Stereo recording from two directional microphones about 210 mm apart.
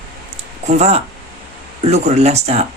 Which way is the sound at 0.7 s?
30° right (ahead or behind).